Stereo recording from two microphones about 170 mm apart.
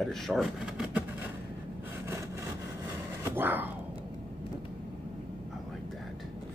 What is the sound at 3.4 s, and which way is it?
Speech, 10° right (ahead or behind).